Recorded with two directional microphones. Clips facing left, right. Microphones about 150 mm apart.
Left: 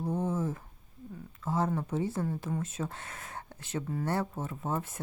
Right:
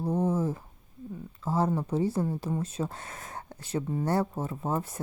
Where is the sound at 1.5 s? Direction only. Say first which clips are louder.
Right 3 dB; 35° right (ahead or behind).